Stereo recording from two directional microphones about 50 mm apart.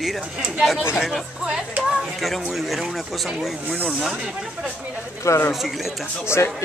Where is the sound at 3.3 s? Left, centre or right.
Centre.